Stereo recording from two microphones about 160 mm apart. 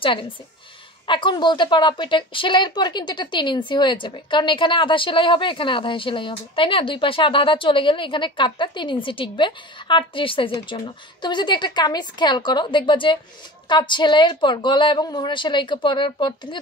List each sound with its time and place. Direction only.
0.0 s a woman's voice: 35° left (ahead or behind)